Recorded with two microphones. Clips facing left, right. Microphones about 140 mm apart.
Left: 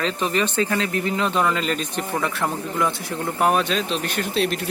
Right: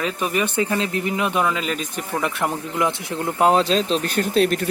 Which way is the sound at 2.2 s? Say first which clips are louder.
Right 1 dB; 15° right (ahead or behind).